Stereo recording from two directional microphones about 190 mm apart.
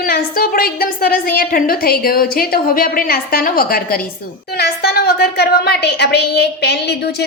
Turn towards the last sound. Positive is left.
turn(degrees=60)  # may be behind; listen again after turning